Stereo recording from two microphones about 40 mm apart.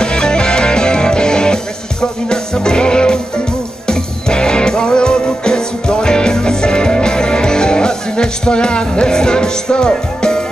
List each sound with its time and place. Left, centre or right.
0.0 s music: left